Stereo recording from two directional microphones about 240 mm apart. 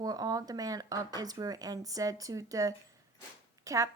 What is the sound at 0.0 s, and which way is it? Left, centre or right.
A woman's voice, centre.